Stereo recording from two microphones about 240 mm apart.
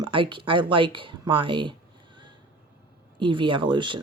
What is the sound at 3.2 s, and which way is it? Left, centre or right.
Speech, right.